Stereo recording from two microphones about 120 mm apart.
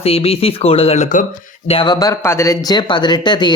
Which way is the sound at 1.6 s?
55° left (ahead or behind).